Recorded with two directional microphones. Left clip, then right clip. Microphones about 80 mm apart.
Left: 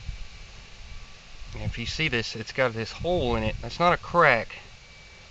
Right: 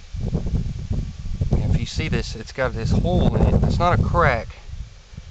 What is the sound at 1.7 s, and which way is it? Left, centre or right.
Speech, right.